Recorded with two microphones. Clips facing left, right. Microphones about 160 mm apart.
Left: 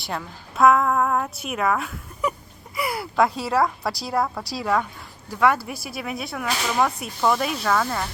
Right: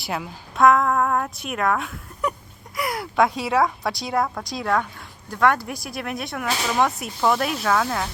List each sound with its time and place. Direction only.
0.0 s a woman's voice: 5° right (ahead or behind)